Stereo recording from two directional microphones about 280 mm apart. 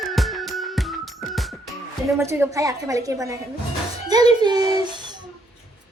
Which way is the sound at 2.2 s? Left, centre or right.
Centre.